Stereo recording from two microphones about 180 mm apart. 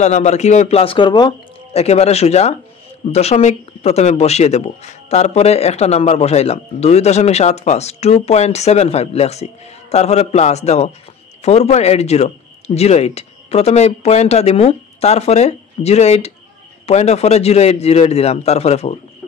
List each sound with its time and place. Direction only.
0.0 s speech: 40° left (ahead or behind)
1.8 s speech: 35° left (ahead or behind)